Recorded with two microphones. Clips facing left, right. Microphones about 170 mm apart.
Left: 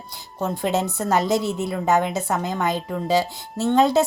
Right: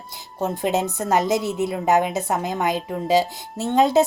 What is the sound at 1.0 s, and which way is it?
A woman's voice, 20° right (ahead or behind).